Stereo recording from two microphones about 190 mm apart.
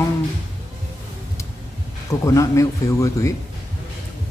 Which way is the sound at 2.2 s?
15° left (ahead or behind).